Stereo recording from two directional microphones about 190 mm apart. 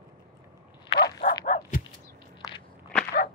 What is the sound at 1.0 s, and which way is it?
Bow-wow, 60° left (ahead or behind).